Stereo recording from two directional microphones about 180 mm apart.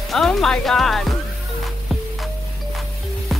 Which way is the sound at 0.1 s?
Centre (ahead or behind).